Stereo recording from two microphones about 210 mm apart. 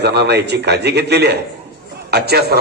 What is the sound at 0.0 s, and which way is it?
A man's voice, 50° right (ahead or behind).